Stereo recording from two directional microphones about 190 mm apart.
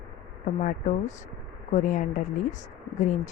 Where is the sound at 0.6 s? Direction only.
40° left (ahead or behind).